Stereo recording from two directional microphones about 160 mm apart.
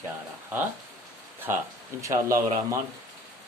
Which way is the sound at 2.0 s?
20° right (ahead or behind).